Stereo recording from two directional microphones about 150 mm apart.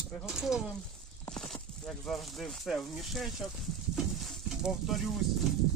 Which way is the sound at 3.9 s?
Centre (ahead or behind).